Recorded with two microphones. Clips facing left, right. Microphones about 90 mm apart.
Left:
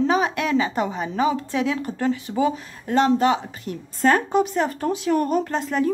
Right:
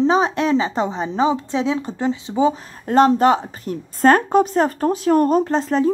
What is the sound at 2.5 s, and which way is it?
A woman's voice, 40° right (ahead or behind).